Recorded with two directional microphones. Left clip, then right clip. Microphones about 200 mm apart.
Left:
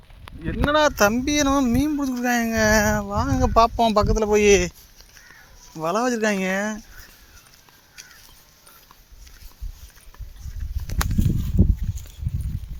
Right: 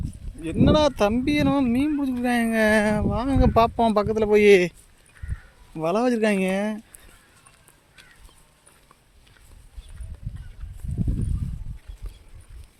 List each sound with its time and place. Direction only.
0.4 s speech: 25° right (ahead or behind)
5.7 s speech: 30° right (ahead or behind)
8.0 s a sound: 50° left (ahead or behind)